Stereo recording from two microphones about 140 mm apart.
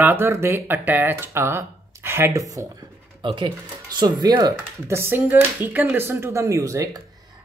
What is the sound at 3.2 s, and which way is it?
Speech, 35° right (ahead or behind).